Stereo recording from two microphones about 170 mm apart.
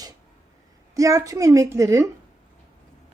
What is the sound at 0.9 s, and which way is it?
Speech, 20° right (ahead or behind).